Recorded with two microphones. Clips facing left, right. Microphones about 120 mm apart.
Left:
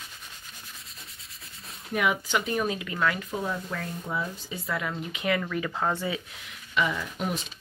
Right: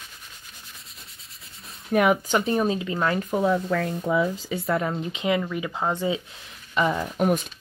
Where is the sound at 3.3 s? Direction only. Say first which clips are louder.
Right 9 dB; 70° right (ahead or behind); by 4.5 s 90° right.